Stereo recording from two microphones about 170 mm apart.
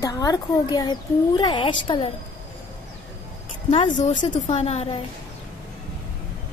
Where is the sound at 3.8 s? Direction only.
45° left (ahead or behind).